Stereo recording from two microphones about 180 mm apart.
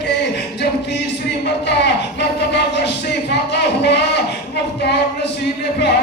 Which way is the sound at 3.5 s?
70° left (ahead or behind).